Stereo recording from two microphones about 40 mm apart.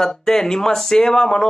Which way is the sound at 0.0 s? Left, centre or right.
Centre.